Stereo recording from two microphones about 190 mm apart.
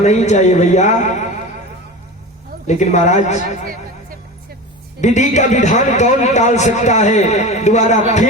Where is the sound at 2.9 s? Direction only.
40° left (ahead or behind).